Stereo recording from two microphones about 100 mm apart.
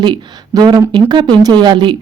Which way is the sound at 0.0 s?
50° right (ahead or behind).